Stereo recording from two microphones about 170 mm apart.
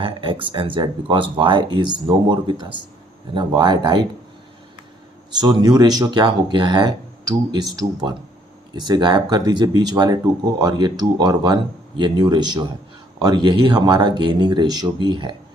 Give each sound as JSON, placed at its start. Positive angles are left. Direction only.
{"t": 0.0, "sound": "speech", "side_deg": -30}
{"t": 5.4, "sound": "speech", "side_deg": -25}